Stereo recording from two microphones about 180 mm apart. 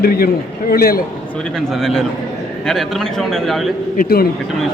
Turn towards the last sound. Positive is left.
turn(degrees=55)  # may be behind; listen again after turning